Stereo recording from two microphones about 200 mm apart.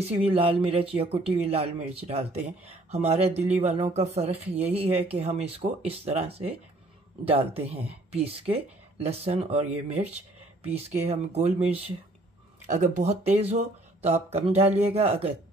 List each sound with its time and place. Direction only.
0.0 s speech: 30° right (ahead or behind)